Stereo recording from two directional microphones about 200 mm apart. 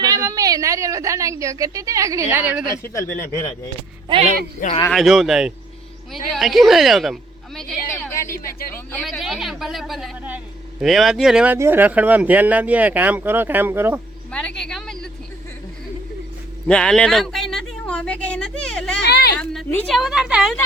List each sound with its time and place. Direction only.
0.0 s speech: 15° right (ahead or behind)
2.6 s speech: 15° left (ahead or behind)
4.9 s a woman's voice: centre (ahead or behind)
7.9 s a sound: 10° left (ahead or behind)
8.7 s speech: 10° left (ahead or behind); by 14.0 s 10° right (ahead or behind)
14.3 s vehicle: 5° left (ahead or behind)
16.6 s a sound: 5° left (ahead or behind)
19.0 s a sound: 55° left (ahead or behind)
19.4 s a woman's voice: 5° left (ahead or behind)